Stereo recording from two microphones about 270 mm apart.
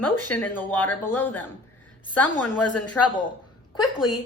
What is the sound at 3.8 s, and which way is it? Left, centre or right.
Speech, centre.